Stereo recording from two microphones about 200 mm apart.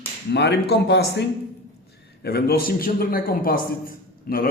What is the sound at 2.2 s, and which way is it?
A man's voice, 50° left (ahead or behind).